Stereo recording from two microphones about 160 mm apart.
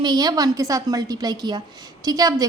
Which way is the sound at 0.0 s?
25° right (ahead or behind).